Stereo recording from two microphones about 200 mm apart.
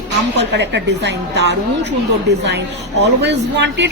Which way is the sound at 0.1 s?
60° right (ahead or behind).